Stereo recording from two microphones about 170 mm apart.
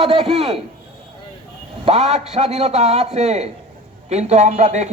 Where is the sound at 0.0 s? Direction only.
35° right (ahead or behind).